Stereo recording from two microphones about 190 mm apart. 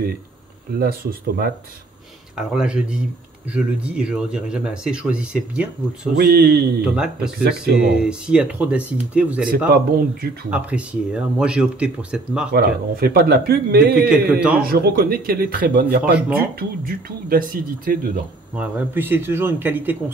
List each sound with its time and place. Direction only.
0.7 s speech: 55° right (ahead or behind)
2.3 s speech: 5° right (ahead or behind)
6.1 s speech: 55° right (ahead or behind)
6.8 s speech: 5° right (ahead or behind)
9.7 s speech: 55° right (ahead or behind)
10.5 s speech: 5° right (ahead or behind)
12.5 s speech: 55° right (ahead or behind)
16.0 s speech: 5° right (ahead or behind)
16.5 s speech: 50° right (ahead or behind)
18.6 s speech: 10° right (ahead or behind)